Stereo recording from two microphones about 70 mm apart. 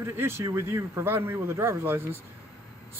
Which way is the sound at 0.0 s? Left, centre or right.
Right.